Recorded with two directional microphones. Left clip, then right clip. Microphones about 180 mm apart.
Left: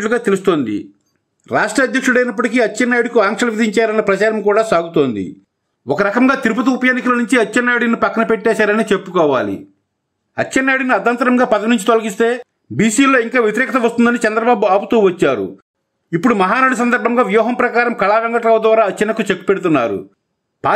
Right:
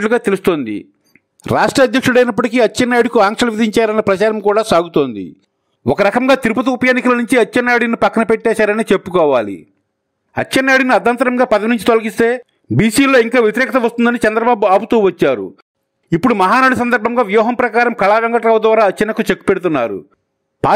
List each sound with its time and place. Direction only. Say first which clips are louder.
0.0 s a man's voice: right 1 dB; 40° right (ahead or behind)
1.4 s a man's voice: right 3 dB; 50° right (ahead or behind); by 20.0 s 30° right (ahead or behind)